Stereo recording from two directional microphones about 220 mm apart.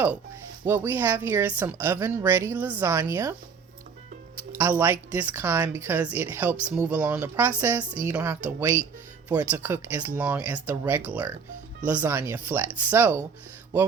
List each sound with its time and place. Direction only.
0.6 s speech: 10° right (ahead or behind)
4.5 s speech: 10° right (ahead or behind)